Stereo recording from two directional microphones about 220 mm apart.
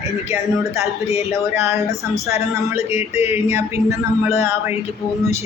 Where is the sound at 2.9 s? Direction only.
30° left (ahead or behind).